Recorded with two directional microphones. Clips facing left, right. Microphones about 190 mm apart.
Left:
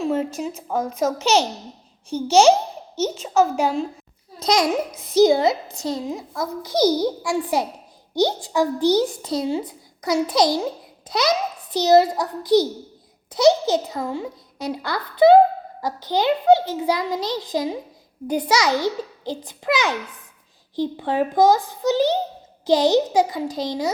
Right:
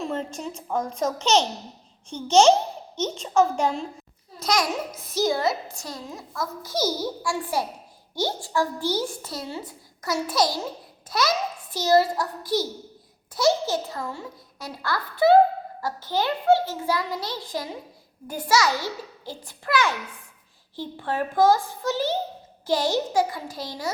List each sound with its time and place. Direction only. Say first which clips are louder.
0.0 s a child's voice: left 7 dB; 5° left (ahead or behind)
4.4 s a child's voice: left 5 dB; 20° left (ahead or behind)